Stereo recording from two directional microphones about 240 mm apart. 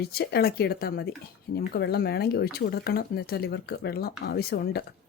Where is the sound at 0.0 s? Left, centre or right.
Left.